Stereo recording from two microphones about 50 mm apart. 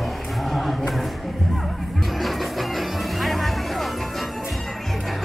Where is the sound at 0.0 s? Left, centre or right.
Centre.